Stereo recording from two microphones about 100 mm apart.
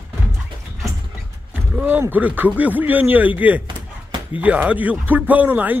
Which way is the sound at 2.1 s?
15° right (ahead or behind).